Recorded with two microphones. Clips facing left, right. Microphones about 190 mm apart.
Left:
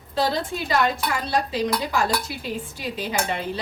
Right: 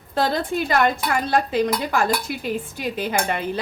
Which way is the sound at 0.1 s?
55° right (ahead or behind).